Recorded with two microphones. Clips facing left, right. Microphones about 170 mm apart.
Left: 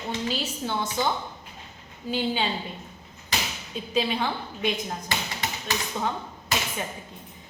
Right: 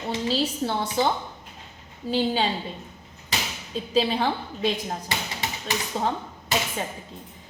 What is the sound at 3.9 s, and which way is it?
A woman's voice, 35° right (ahead or behind).